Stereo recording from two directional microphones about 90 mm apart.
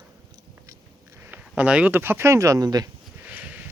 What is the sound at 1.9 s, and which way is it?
Speech, 25° right (ahead or behind).